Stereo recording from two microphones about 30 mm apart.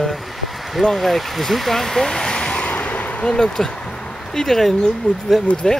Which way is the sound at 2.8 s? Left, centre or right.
Left.